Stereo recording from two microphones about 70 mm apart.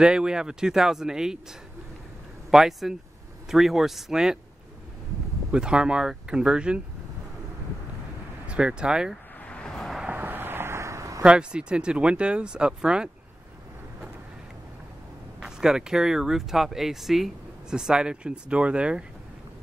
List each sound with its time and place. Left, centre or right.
0.0 s speech: centre
2.5 s speech: centre
5.5 s speech: centre
8.5 s speech: centre
9.4 s vehicle: centre
10.0 s a sound: right
11.2 s speech: centre
15.4 s speech: centre